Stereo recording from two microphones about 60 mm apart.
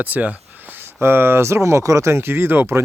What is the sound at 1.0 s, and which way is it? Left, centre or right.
Speech, right.